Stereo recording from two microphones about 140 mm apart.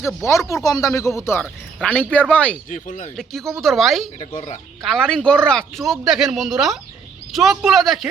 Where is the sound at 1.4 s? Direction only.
5° left (ahead or behind).